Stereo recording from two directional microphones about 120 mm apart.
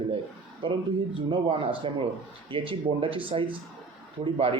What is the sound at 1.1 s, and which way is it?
Speech, 45° right (ahead or behind).